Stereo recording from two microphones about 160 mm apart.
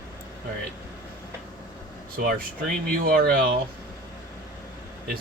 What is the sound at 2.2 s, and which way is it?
Speech, 70° right (ahead or behind).